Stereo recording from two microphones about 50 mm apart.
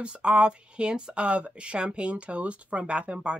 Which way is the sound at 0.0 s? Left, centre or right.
Right.